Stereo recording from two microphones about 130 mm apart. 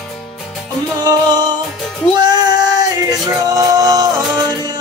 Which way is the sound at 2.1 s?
30° right (ahead or behind).